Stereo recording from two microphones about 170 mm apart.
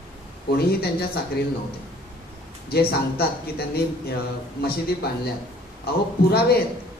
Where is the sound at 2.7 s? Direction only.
65° left (ahead or behind).